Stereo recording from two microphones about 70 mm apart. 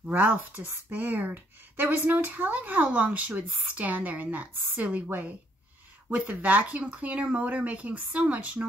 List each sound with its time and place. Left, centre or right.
0.0 s speech: right